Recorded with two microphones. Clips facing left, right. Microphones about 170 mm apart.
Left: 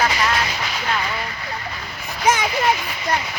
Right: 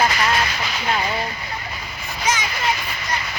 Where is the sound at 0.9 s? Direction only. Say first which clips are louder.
Right 2 dB; 25° right (ahead or behind).